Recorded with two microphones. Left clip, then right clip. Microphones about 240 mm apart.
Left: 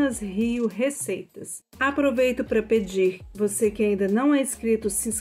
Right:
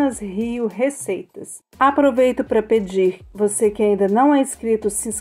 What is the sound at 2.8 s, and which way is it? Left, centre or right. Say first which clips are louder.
A woman's voice: right 5 dB; centre.